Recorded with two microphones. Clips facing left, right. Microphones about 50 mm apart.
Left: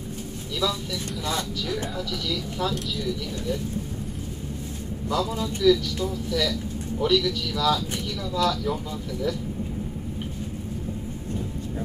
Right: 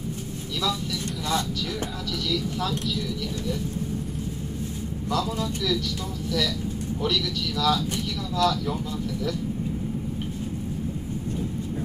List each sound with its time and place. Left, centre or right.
5.1 s speech: centre
7.0 s speech: centre